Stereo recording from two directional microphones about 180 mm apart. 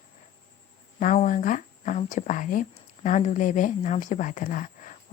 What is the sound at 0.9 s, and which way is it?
Speech, 45° left (ahead or behind).